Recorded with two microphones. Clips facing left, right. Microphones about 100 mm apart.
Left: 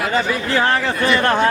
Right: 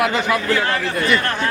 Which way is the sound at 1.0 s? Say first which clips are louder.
Left 5 dB; 30° left (ahead or behind).